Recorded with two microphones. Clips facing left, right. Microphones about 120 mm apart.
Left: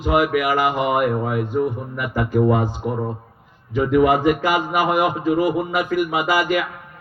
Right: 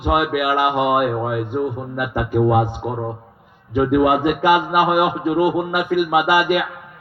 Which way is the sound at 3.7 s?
20° right (ahead or behind).